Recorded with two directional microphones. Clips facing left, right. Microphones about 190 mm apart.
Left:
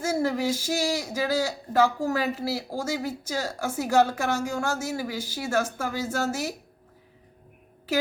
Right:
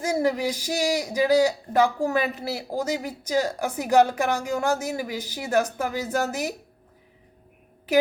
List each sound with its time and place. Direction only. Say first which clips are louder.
0.0 s a woman's voice: right 2 dB; 15° right (ahead or behind)